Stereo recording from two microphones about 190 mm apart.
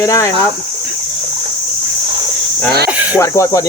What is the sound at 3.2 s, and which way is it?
Speech, 15° left (ahead or behind).